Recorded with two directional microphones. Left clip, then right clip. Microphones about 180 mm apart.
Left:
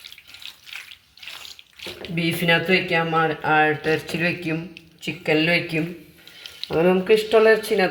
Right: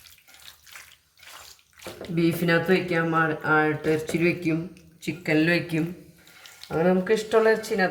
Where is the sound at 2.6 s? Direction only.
30° left (ahead or behind).